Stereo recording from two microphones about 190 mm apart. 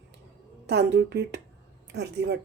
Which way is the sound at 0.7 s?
60° right (ahead or behind).